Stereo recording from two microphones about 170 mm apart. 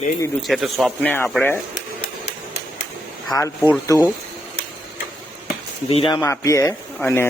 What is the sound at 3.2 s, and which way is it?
Speech, 20° left (ahead or behind).